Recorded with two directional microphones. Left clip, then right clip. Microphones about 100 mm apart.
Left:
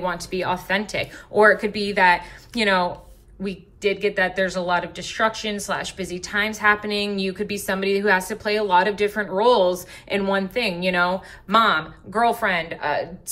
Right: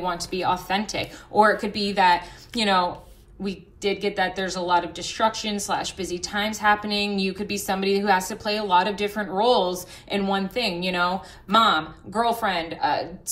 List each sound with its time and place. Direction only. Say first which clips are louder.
0.0 s a woman's voice: even; 20° right (ahead or behind)